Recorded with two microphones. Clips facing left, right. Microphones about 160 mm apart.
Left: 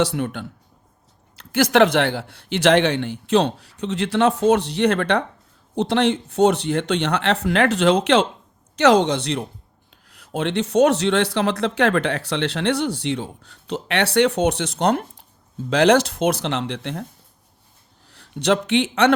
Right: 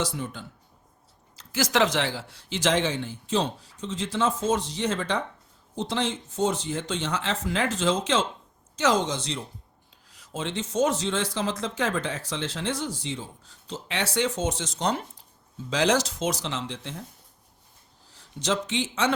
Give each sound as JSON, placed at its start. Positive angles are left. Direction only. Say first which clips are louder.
{"t": 0.0, "sound": "a man's voice", "louder": "left 9 dB", "side_deg": 65}